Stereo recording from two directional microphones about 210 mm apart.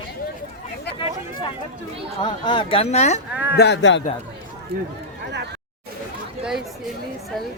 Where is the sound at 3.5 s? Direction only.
50° left (ahead or behind).